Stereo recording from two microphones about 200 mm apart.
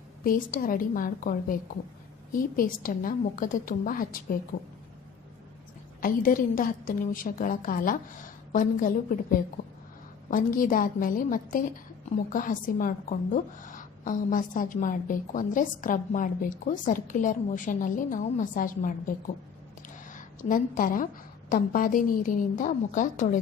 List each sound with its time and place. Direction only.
0.2 s a woman's voice: 45° left (ahead or behind)
5.9 s a woman's voice: 45° left (ahead or behind)
20.2 s a woman's voice: 40° left (ahead or behind)